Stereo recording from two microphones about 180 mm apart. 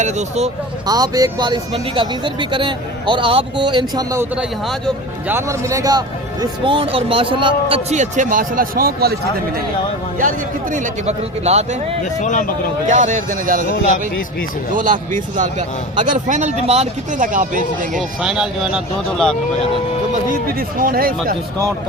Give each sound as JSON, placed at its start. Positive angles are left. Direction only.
{"t": 0.0, "sound": "a man's voice", "side_deg": -40}
{"t": 0.9, "sound": "speech", "side_deg": -20}
{"t": 4.4, "sound": "speech", "side_deg": 0}
{"t": 5.3, "sound": "a man's voice", "side_deg": -15}
{"t": 10.2, "sound": "a man's voice", "side_deg": -50}
{"t": 12.2, "sound": "a man's voice", "side_deg": 45}
{"t": 12.9, "sound": "a man's voice", "side_deg": -45}
{"t": 14.7, "sound": "a man's voice", "side_deg": -45}
{"t": 18.2, "sound": "speech", "side_deg": -5}
{"t": 20.6, "sound": "a man's voice", "side_deg": -50}